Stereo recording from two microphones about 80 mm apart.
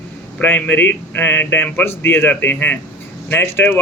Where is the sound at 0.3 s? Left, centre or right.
Left.